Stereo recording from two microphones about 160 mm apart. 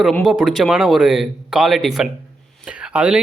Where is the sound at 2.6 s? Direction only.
5° right (ahead or behind).